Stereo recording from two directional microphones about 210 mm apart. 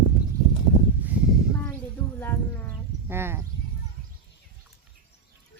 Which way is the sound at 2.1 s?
10° left (ahead or behind).